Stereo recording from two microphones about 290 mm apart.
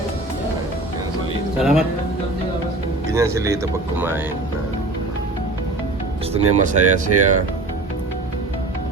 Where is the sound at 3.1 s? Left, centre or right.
Centre.